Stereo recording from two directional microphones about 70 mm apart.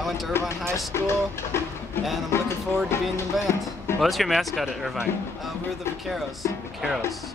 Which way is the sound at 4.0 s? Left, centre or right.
Centre.